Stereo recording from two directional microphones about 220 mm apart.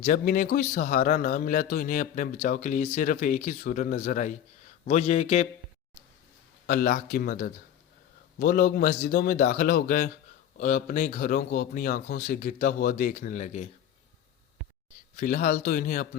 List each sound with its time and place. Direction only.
0.0 s a man's voice: 40° left (ahead or behind)
6.7 s a man's voice: 40° left (ahead or behind)
15.1 s a man's voice: 40° left (ahead or behind)